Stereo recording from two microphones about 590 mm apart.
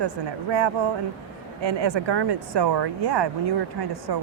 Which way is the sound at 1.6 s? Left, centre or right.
Right.